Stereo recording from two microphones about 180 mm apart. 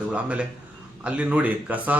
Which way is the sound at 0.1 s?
5° right (ahead or behind).